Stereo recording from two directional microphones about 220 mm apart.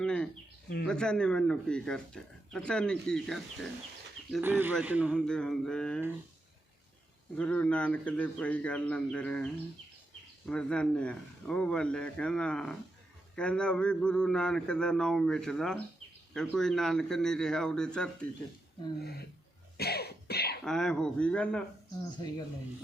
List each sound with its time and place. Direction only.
0.0 s a sound: 5° left (ahead or behind)
0.9 s speech: 5° left (ahead or behind)
4.4 s speech: 10° right (ahead or behind)
7.3 s speech: 5° left (ahead or behind)
19.7 s cough: 45° left (ahead or behind)
20.7 s speech: 5° left (ahead or behind)